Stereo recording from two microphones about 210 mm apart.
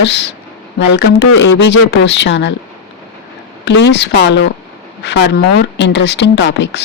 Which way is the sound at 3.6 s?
55° left (ahead or behind).